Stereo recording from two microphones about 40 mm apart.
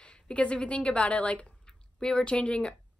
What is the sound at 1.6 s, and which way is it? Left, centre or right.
Speech, left.